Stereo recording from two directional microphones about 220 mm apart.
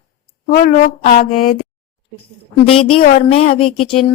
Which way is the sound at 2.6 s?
25° left (ahead or behind).